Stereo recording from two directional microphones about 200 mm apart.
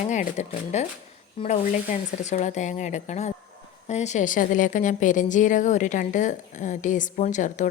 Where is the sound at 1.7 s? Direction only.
40° left (ahead or behind).